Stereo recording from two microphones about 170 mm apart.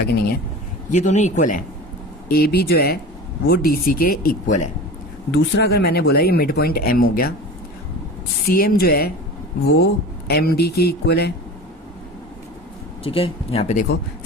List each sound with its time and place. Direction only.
0.9 s a man's voice: 45° left (ahead or behind)
2.3 s speech: 65° left (ahead or behind)
5.3 s speech: 70° left (ahead or behind)
8.4 s speech: 60° left (ahead or behind)
9.7 s speech: 75° left (ahead or behind)
13.1 s speech: 35° left (ahead or behind)